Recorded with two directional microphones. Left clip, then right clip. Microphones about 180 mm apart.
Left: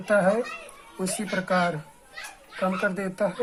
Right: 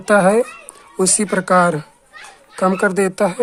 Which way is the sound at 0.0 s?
50° right (ahead or behind).